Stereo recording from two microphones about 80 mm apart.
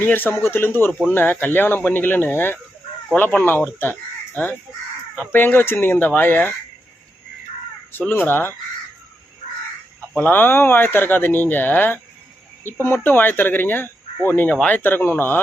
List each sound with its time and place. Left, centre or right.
0.0 s speech: left
0.9 s speech: centre
1.1 s speech: left
8.1 s speech: left
10.2 s speech: left